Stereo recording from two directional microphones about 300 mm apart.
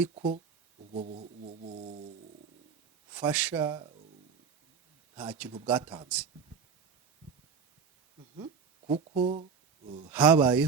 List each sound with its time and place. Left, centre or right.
0.1 s speech: right
0.9 s a sound: right
3.1 s speech: centre
5.1 s speech: centre
8.9 s speech: centre
10.1 s speech: centre